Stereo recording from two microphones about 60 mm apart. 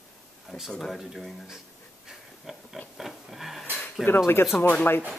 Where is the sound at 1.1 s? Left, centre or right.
Centre.